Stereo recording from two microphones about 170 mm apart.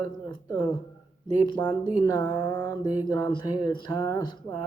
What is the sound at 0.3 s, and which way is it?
Speech, 25° left (ahead or behind).